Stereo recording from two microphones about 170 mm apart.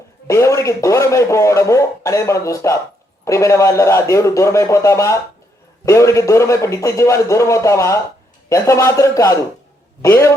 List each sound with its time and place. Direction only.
0.3 s speech: 15° left (ahead or behind)